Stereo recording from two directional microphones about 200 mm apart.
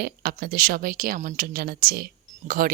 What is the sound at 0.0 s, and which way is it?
Speech, 50° right (ahead or behind).